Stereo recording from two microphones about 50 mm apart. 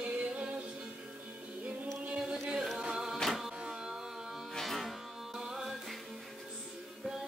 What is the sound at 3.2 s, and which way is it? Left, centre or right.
Music, centre.